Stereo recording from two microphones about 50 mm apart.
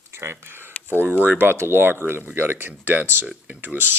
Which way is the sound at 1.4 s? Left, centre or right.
Right.